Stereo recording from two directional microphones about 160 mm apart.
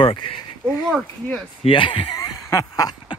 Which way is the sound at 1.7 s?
30° left (ahead or behind).